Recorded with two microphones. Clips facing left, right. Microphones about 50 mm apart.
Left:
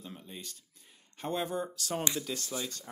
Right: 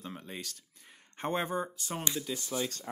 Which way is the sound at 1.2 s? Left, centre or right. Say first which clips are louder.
Right 1 dB; right.